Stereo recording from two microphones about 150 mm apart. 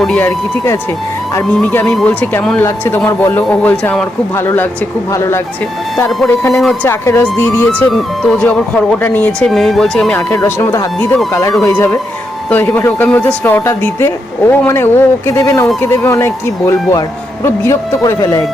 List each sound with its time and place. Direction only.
0.0 s speech: 10° left (ahead or behind)
6.5 s speech: centre (ahead or behind)
6.8 s speech: 15° left (ahead or behind)
7.9 s speech: 5° left (ahead or behind); by 18.4 s 20° left (ahead or behind)